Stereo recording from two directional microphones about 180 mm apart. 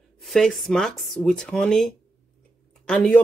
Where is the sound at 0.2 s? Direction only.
Centre (ahead or behind).